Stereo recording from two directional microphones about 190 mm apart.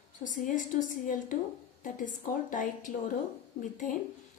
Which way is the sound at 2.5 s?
45° left (ahead or behind).